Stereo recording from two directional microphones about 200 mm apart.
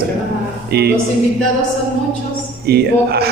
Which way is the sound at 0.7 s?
55° right (ahead or behind).